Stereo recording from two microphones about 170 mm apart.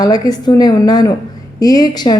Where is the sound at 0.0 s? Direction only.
25° left (ahead or behind).